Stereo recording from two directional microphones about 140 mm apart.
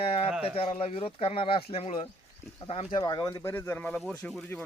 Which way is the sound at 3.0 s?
25° left (ahead or behind).